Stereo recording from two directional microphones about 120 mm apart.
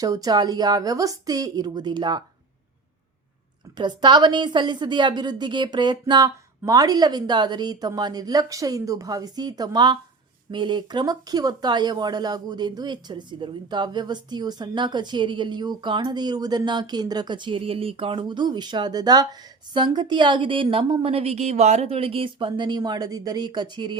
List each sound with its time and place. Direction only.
0.0 s speech: 30° right (ahead or behind)
3.8 s speech: 40° right (ahead or behind)